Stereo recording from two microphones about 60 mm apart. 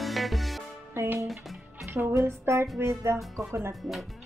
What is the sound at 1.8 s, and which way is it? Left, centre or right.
Music, right.